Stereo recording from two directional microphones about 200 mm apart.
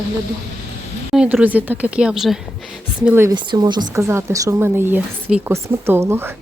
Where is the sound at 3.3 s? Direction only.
25° right (ahead or behind).